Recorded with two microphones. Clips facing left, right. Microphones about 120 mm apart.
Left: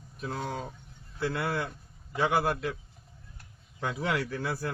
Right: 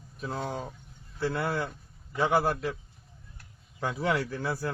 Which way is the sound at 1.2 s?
40° right (ahead or behind).